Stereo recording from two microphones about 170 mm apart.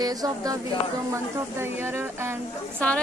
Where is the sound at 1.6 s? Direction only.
15° right (ahead or behind).